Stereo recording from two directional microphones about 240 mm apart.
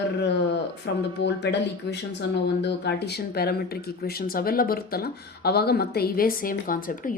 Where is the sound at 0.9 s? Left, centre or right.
Left.